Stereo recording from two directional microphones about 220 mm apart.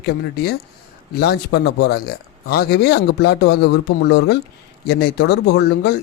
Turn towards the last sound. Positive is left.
turn(degrees=45)  # may be behind; listen again after turning